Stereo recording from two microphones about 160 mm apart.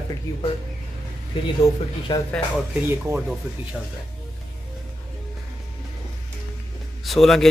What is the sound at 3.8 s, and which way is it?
Speech, centre (ahead or behind).